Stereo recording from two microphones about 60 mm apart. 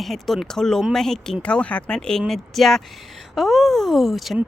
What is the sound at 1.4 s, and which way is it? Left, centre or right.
Speech, centre.